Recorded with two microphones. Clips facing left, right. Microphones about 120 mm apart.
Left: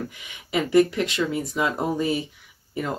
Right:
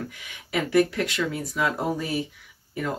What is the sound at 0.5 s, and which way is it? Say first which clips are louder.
Speech: left 3 dB; 20° left (ahead or behind).